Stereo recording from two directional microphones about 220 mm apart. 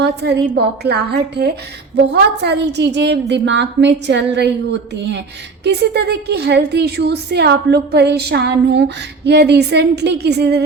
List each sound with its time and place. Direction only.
0.0 s a woman's voice: 50° right (ahead or behind)